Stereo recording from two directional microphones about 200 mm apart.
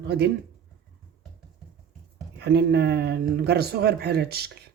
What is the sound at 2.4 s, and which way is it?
Speech, 55° right (ahead or behind).